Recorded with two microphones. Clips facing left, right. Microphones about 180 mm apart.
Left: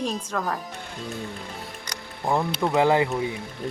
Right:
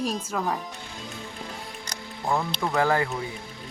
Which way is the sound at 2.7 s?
20° left (ahead or behind).